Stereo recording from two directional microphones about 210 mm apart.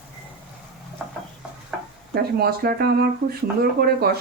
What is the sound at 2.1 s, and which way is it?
Speech, 50° right (ahead or behind).